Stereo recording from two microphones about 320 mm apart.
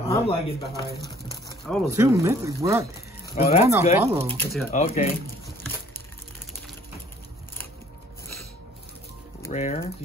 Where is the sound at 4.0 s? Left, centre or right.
Centre.